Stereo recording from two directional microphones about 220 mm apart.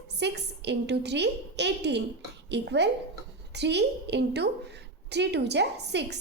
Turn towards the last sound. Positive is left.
turn(degrees=-50)  # may be behind; listen again after turning